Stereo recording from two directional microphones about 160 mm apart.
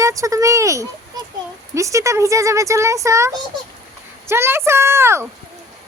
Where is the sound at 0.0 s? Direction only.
20° right (ahead or behind).